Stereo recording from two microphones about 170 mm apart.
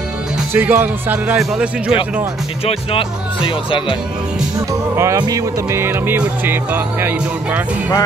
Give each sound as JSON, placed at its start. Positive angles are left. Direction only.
{"t": 0.5, "sound": "music", "side_deg": -10}
{"t": 2.6, "sound": "speech", "side_deg": 35}
{"t": 4.9, "sound": "music", "side_deg": -15}